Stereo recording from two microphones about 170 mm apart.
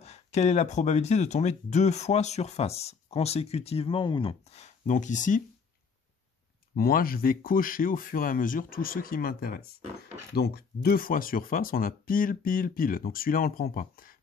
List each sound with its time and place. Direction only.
0.0 s speech: 40° left (ahead or behind)
6.7 s speech: 60° left (ahead or behind)